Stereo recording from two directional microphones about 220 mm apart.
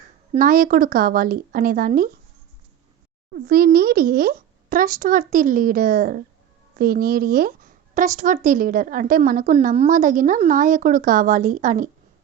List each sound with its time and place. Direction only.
0.3 s a woman's voice: 40° right (ahead or behind)
3.3 s a woman's voice: 45° right (ahead or behind)